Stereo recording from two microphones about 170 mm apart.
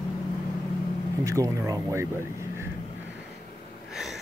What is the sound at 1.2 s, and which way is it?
Speech, 20° right (ahead or behind).